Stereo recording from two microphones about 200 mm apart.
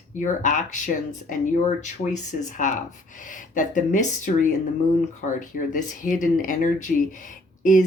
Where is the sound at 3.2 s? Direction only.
40° left (ahead or behind).